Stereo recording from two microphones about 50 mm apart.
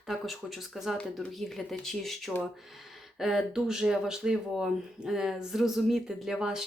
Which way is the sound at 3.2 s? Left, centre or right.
Centre.